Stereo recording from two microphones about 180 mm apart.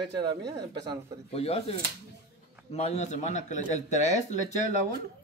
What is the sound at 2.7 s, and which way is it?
Speech, 35° left (ahead or behind).